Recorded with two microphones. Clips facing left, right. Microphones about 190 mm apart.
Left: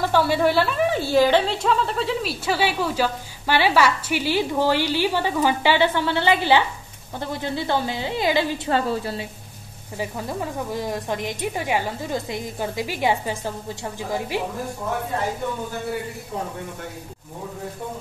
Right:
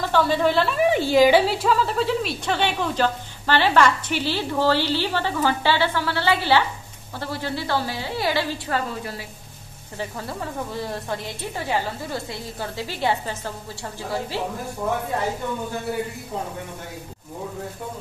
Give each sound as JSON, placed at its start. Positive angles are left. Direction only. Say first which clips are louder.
{"t": 0.1, "sound": "a woman's voice", "louder": "right 1 dB", "side_deg": 10}
{"t": 0.9, "sound": "a woman's voice", "louder": "right 2 dB", "side_deg": -15}
{"t": 9.9, "sound": "a woman's voice", "louder": "left 3 dB", "side_deg": 15}